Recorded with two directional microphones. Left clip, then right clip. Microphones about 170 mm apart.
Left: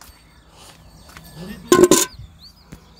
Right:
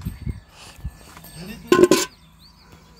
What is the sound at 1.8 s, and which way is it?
Music, 45° left (ahead or behind).